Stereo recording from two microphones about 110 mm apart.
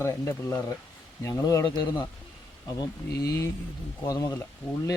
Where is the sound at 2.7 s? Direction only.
30° left (ahead or behind).